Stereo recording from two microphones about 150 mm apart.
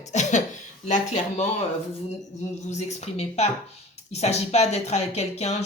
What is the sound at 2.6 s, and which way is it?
Speech, 50° left (ahead or behind).